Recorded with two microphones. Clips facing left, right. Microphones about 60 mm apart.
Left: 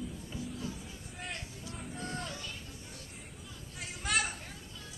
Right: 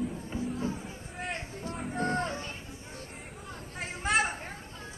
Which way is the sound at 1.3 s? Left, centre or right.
Right.